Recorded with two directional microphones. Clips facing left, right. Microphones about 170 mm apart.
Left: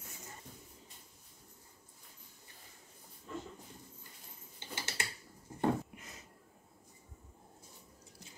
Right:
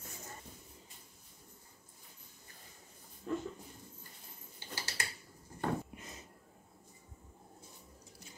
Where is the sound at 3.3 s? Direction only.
65° right (ahead or behind).